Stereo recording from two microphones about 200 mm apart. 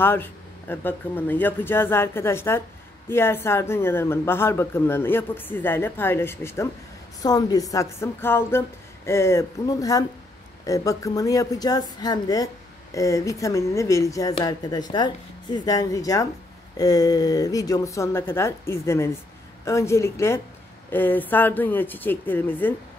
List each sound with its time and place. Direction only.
0.0 s speech: 10° left (ahead or behind)